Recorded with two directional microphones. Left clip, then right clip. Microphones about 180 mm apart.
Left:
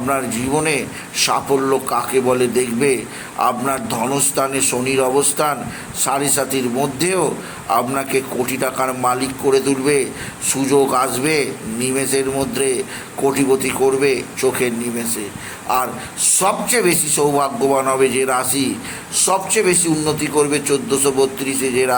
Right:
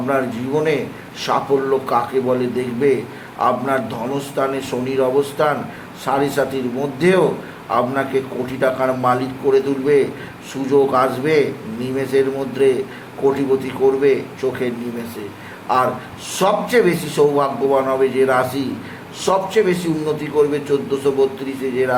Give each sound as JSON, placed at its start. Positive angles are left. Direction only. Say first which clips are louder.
{"t": 0.1, "sound": "a man's voice", "louder": "even", "side_deg": 25}
{"t": 15.7, "sound": "a man's voice", "louder": "right 2 dB", "side_deg": 20}